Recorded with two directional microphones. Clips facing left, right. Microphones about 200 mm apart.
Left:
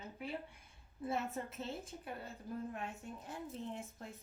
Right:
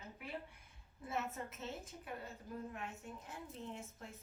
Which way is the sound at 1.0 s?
30° left (ahead or behind).